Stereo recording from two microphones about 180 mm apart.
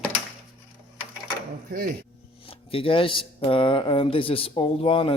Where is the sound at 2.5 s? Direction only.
30° left (ahead or behind).